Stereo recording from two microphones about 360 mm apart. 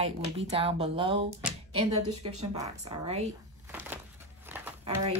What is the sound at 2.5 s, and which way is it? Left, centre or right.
Speech, centre.